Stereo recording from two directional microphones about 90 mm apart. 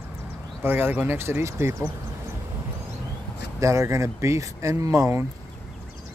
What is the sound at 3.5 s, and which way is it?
Speech, 35° right (ahead or behind).